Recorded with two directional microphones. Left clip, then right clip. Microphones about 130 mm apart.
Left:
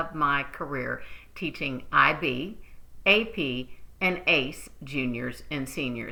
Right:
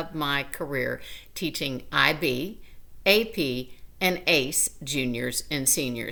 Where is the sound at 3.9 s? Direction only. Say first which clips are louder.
Right 1 dB; 35° right (ahead or behind).